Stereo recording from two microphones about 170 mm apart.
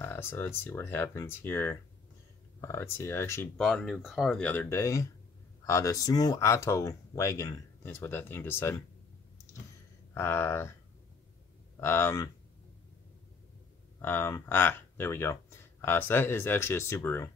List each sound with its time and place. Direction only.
0.0 s speech: 10° left (ahead or behind)
3.5 s speech: 5° left (ahead or behind)
10.1 s speech: 15° left (ahead or behind)
11.7 s speech: 15° left (ahead or behind)
14.0 s speech: 15° left (ahead or behind)